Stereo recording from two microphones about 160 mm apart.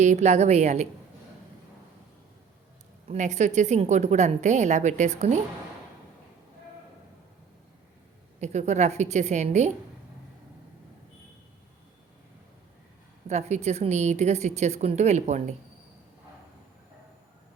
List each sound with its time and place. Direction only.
0.0 s a woman's voice: 45° right (ahead or behind)
3.1 s a woman's voice: 45° right (ahead or behind)
8.4 s a woman's voice: 45° right (ahead or behind)
13.2 s a woman's voice: 45° right (ahead or behind)